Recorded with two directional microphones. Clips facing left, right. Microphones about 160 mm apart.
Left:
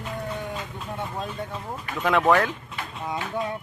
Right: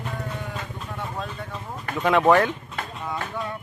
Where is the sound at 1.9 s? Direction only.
Centre (ahead or behind).